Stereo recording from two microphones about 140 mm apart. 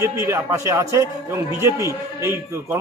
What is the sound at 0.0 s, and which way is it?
A man's voice, 20° right (ahead or behind).